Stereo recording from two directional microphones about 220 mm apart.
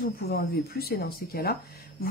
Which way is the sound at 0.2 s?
45° left (ahead or behind).